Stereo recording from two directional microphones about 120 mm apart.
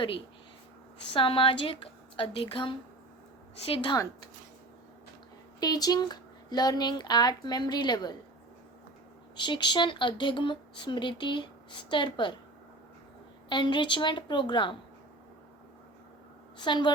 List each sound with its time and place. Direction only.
1.1 s speech: 45° left (ahead or behind)
5.5 s speech: 35° left (ahead or behind)
9.3 s speech: 40° left (ahead or behind)
13.5 s speech: 40° left (ahead or behind)
16.6 s speech: 40° left (ahead or behind)